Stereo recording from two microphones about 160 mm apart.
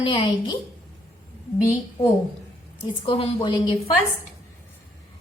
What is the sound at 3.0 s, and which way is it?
Speech, 35° left (ahead or behind).